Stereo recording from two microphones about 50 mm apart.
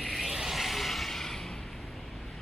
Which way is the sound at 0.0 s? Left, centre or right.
Centre.